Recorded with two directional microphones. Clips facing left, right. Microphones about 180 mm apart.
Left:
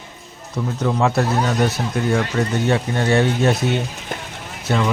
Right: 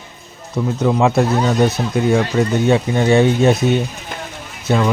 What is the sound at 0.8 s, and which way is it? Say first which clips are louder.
Speech: right 4 dB; 20° right (ahead or behind).